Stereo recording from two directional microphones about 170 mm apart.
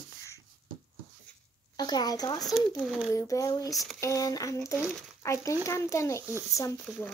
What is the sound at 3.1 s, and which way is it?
A woman's voice, 20° left (ahead or behind).